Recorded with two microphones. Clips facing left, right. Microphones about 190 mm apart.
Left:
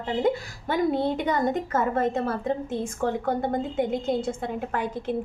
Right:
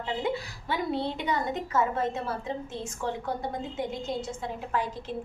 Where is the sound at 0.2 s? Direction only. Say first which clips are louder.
Left 6 dB; 45° left (ahead or behind).